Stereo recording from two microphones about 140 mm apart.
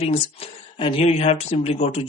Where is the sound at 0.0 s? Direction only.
45° left (ahead or behind).